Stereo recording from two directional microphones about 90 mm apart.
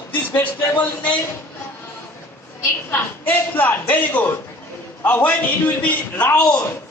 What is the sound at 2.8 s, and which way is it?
A man's voice, 20° left (ahead or behind).